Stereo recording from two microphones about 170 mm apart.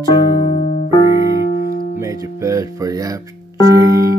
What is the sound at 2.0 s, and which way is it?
Speech, 20° right (ahead or behind).